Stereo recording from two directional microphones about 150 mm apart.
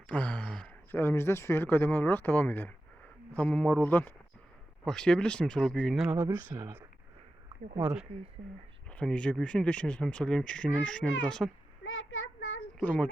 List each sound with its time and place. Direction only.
0.1 s speech: 10° left (ahead or behind)
6.1 s speech: 20° right (ahead or behind)
8.9 s speech: 5° left (ahead or behind)
12.8 s speech: 10° left (ahead or behind)